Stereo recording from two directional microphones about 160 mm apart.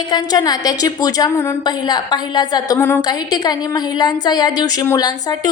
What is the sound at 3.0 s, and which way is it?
A woman's voice, 25° left (ahead or behind).